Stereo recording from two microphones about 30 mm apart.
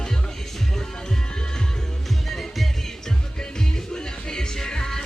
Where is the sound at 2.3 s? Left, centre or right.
Centre.